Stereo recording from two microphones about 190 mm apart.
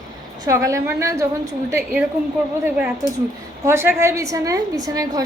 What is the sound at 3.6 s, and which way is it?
A woman's voice, 10° right (ahead or behind).